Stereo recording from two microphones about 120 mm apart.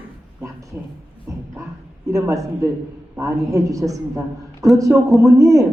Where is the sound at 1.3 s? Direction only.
25° right (ahead or behind).